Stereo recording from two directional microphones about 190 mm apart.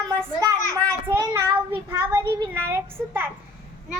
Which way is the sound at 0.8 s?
5° left (ahead or behind).